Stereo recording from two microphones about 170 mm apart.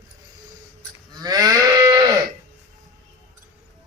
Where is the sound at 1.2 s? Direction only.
20° right (ahead or behind).